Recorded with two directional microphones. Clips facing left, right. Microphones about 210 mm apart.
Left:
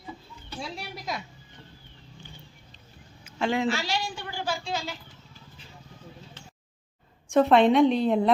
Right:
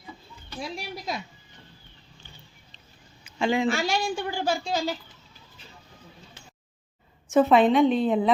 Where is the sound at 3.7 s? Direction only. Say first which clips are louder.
Right 4 dB; 50° right (ahead or behind).